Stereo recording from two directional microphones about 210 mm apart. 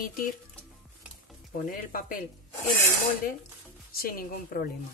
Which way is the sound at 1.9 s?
40° left (ahead or behind).